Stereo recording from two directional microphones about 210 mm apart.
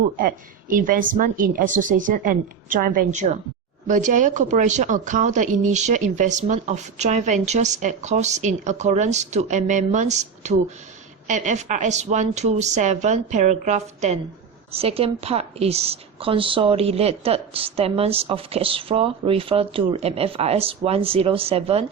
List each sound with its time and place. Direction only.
0.2 s a woman's voice: 40° right (ahead or behind)